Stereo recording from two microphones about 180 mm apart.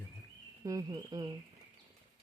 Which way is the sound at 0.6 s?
20° right (ahead or behind).